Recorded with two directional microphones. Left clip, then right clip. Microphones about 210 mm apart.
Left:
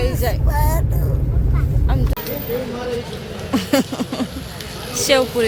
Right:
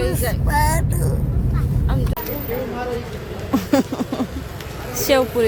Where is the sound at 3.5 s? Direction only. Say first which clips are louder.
Even; 10° right (ahead or behind).